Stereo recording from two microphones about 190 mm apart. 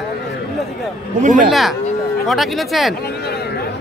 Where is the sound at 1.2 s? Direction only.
45° right (ahead or behind).